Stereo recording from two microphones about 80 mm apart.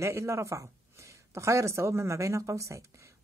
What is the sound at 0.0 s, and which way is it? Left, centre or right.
A woman's voice, right.